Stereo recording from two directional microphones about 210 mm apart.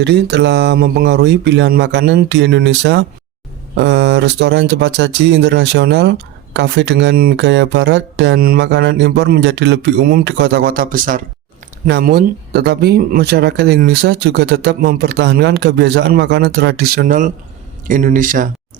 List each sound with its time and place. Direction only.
0.0 s speech: 55° right (ahead or behind)